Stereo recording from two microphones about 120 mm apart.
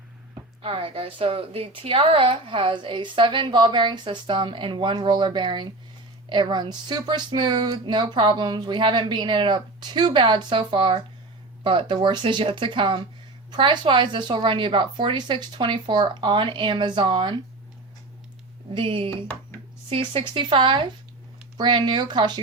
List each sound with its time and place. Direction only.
0.6 s a woman's voice: 50° right (ahead or behind)
18.7 s a woman's voice: 50° right (ahead or behind)